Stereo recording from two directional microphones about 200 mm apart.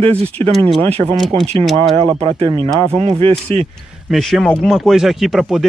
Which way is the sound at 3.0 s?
30° right (ahead or behind).